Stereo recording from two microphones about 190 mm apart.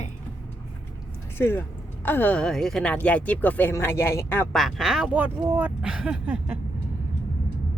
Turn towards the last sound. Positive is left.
turn(degrees=-5)  # may be behind; listen again after turning